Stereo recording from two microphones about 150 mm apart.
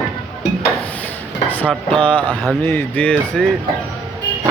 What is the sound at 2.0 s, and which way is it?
Speech, 10° left (ahead or behind).